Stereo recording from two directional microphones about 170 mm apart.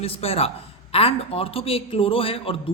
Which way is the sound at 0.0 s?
35° left (ahead or behind).